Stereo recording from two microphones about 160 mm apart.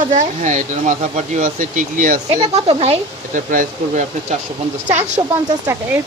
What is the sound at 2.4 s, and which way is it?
Speech, 40° right (ahead or behind).